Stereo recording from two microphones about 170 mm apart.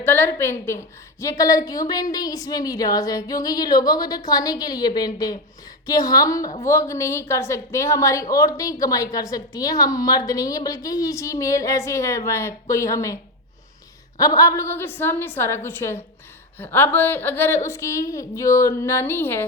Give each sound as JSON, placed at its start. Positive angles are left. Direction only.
{"t": 0.0, "sound": "a woman's voice", "side_deg": 10}
{"t": 14.2, "sound": "a woman's voice", "side_deg": 20}